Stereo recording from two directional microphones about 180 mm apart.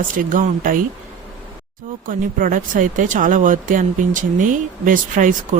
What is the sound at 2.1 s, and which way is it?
Speech, 50° right (ahead or behind).